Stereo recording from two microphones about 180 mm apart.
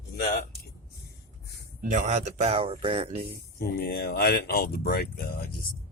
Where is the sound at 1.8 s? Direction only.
45° right (ahead or behind).